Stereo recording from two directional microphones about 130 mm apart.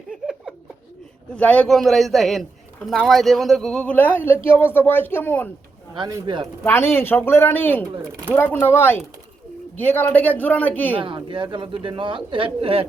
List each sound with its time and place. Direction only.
1.4 s a man's voice: 10° left (ahead or behind)
5.9 s speech: 35° right (ahead or behind)
6.7 s speech: 20° left (ahead or behind)
8.0 s speech: 15° right (ahead or behind)
8.4 s speech: 15° left (ahead or behind)
10.9 s speech: 40° right (ahead or behind)